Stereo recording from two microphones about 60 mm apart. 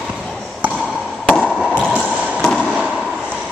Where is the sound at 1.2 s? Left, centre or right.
Centre.